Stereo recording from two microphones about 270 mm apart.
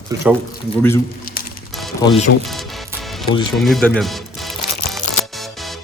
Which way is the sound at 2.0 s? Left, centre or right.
Left.